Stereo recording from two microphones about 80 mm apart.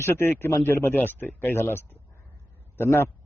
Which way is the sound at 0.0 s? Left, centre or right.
Left.